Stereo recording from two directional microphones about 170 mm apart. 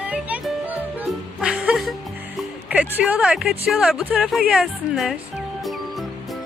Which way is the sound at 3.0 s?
5° right (ahead or behind).